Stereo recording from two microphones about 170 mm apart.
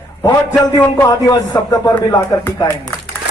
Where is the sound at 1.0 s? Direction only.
25° left (ahead or behind).